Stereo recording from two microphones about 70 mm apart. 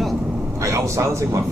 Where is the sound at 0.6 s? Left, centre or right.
Right.